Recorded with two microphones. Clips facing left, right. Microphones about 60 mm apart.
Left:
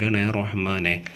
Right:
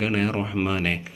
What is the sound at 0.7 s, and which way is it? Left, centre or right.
Speech, left.